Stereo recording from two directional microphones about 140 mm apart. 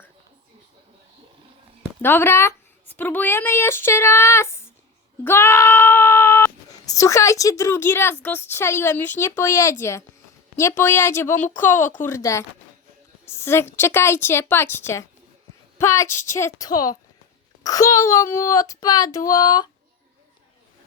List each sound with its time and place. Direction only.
2.0 s speech: 15° left (ahead or behind)